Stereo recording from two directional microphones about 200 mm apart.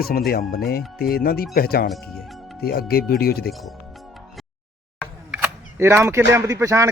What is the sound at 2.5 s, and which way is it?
Speech, 50° left (ahead or behind).